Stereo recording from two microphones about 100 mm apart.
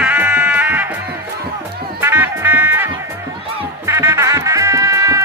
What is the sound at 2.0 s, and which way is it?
Music, 25° right (ahead or behind).